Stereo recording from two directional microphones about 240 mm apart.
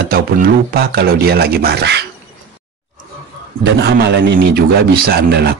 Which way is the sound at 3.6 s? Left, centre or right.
Right.